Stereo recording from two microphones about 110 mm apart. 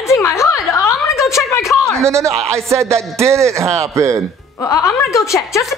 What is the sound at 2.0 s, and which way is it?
Speech, 25° right (ahead or behind).